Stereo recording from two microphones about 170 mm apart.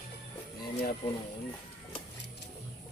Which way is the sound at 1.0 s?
35° left (ahead or behind).